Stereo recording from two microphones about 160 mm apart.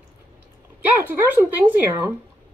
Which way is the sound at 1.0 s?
10° right (ahead or behind).